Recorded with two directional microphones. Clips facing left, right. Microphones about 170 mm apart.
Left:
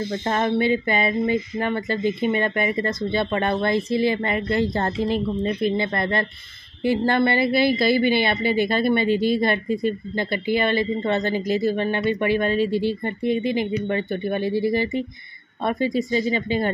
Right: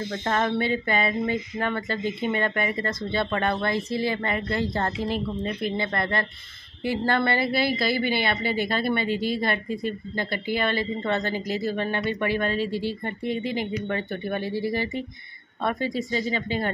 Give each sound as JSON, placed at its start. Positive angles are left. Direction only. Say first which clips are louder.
{"t": 0.2, "sound": "speech", "louder": "left 3 dB", "side_deg": 20}